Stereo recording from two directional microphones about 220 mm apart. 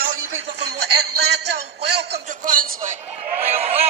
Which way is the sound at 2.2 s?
35° right (ahead or behind).